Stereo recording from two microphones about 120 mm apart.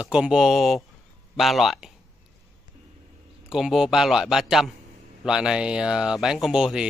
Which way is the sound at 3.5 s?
5° right (ahead or behind).